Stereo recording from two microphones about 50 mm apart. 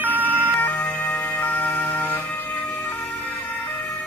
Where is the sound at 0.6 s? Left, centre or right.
Left.